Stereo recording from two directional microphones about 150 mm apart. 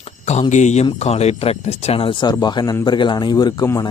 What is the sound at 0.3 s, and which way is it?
Speech, 50° left (ahead or behind).